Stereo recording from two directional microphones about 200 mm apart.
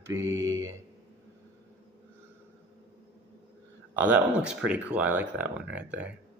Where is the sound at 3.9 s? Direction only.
10° right (ahead or behind).